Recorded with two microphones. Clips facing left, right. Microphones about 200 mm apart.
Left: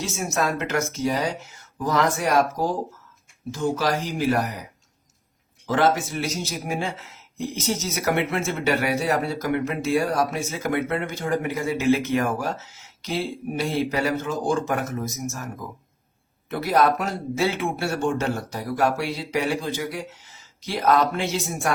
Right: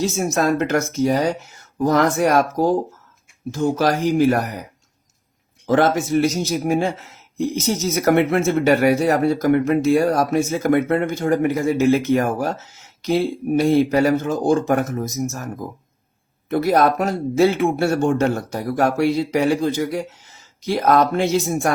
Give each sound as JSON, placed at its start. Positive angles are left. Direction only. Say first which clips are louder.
{"t": 0.0, "sound": "speech", "louder": "right 6 dB", "side_deg": -40}
{"t": 3.5, "sound": "speech", "louder": "right 5 dB", "side_deg": -50}
{"t": 5.6, "sound": "speech", "louder": "right 4 dB", "side_deg": -50}
{"t": 16.5, "sound": "speech", "louder": "right 4 dB", "side_deg": -45}